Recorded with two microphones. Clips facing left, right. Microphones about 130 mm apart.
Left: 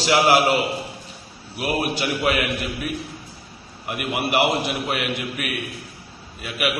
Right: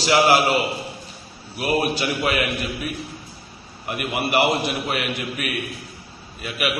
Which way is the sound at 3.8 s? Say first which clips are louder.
Even; 15° left (ahead or behind).